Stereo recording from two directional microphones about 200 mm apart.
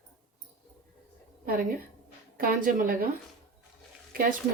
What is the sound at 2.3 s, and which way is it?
Speech, 45° right (ahead or behind).